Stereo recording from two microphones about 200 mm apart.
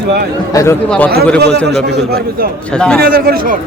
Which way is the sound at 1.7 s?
55° right (ahead or behind).